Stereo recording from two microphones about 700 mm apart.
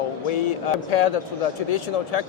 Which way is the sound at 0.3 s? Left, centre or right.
Left.